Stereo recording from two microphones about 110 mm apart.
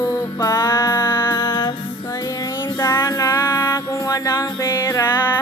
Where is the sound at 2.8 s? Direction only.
30° left (ahead or behind).